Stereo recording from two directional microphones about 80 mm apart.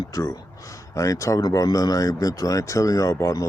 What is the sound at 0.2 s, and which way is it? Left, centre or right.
Speech, left.